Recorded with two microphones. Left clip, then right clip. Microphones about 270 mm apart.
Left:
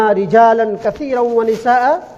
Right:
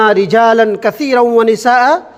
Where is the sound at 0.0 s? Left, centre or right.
Right.